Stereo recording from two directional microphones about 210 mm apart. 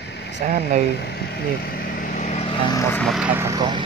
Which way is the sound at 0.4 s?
40° right (ahead or behind).